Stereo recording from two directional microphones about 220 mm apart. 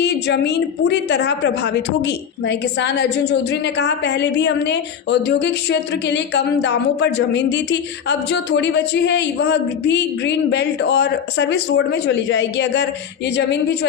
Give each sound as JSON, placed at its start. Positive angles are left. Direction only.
{"t": 0.0, "sound": "a woman's voice", "side_deg": 50}